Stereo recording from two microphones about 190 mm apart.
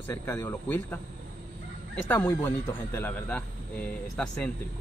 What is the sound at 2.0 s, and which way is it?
Speech, 10° left (ahead or behind).